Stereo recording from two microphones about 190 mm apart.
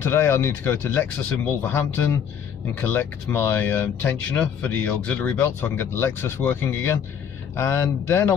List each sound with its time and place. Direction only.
0.0 s speech: 15° left (ahead or behind)